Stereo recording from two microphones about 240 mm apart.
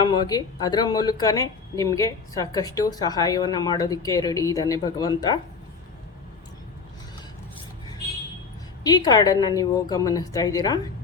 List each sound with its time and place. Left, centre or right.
0.0 s a woman's voice: centre
8.8 s a woman's voice: centre